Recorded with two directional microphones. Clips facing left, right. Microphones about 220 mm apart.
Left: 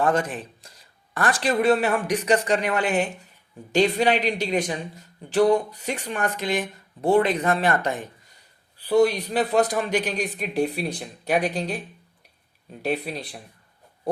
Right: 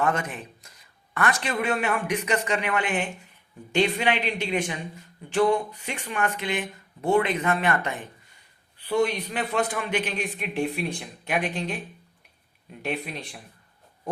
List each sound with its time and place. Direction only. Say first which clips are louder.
0.0 s speech: left 4 dB; 35° left (ahead or behind)
12.8 s speech: left 4 dB; 35° left (ahead or behind)